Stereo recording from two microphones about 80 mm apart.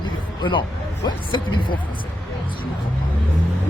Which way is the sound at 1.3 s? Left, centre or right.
Left.